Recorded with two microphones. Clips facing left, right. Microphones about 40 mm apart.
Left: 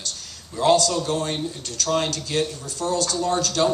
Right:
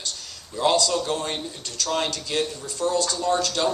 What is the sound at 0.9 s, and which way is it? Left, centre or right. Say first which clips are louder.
Speech: left 1 dB; right.